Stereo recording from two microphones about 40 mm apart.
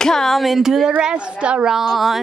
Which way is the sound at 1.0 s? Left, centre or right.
Right.